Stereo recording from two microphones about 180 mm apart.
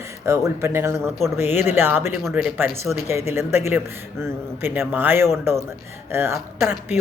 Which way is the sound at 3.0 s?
15° right (ahead or behind).